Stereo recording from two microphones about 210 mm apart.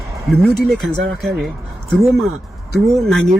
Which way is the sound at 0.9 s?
55° right (ahead or behind).